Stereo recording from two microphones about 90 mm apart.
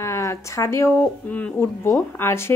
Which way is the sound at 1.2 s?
15° left (ahead or behind).